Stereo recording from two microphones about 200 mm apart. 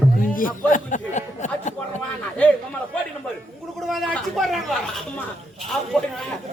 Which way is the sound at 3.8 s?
Centre (ahead or behind).